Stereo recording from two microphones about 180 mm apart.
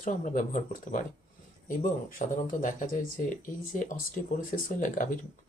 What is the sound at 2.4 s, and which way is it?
Speech, 45° left (ahead or behind).